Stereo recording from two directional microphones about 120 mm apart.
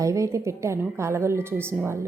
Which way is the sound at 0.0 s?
25° right (ahead or behind).